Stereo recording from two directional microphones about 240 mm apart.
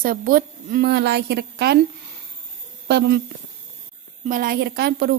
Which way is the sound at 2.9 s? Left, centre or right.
Right.